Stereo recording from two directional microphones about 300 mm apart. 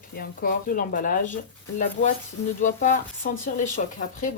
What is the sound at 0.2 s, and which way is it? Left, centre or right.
A woman's voice, left.